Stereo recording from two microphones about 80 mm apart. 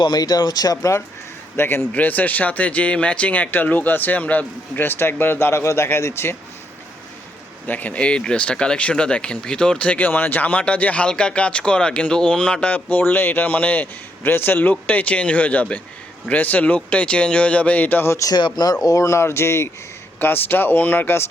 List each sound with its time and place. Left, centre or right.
0.0 s speech: left
0.8 s speech: left
1.5 s speech: left
7.7 s speech: left
18.3 s speech: left
18.9 s speech: left